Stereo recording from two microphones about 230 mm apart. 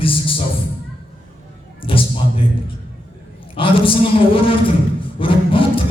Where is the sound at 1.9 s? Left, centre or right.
Left.